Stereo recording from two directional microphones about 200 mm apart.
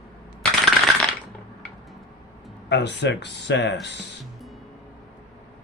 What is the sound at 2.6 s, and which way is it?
Speech, 60° left (ahead or behind).